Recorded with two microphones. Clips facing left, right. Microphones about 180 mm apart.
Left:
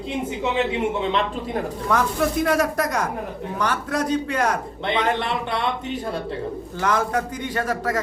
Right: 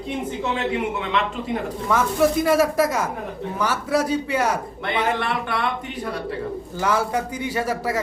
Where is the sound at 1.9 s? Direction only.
Centre (ahead or behind).